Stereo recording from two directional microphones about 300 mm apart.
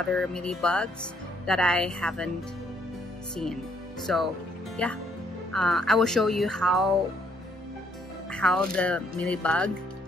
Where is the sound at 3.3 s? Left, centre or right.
Centre.